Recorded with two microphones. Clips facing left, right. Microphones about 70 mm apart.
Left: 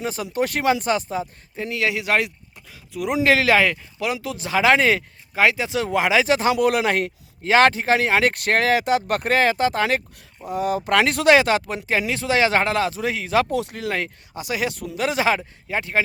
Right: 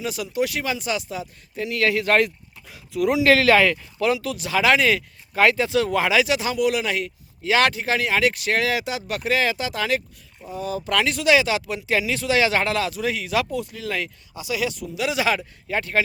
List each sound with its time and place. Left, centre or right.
0.0 s speech: left
1.7 s speech: centre
2.6 s speech: centre
3.2 s speech: centre
5.3 s speech: centre
6.2 s speech: left
7.5 s speech: left
10.2 s speech: left
11.9 s speech: left
13.5 s speech: left
15.4 s speech: left